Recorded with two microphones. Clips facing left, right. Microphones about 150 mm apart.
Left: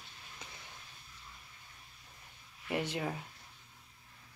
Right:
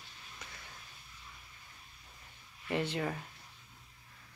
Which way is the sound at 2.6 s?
10° left (ahead or behind).